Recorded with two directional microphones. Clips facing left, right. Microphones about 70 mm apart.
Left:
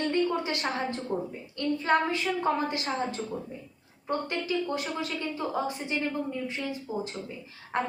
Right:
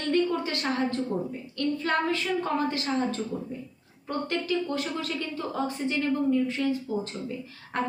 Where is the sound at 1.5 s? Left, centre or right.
Left.